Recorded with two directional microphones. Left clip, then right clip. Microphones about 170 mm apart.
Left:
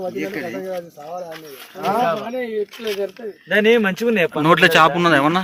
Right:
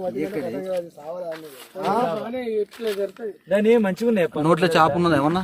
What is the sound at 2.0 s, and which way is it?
Speech, 25° left (ahead or behind).